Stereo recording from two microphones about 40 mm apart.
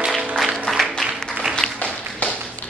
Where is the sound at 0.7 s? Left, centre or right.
Centre.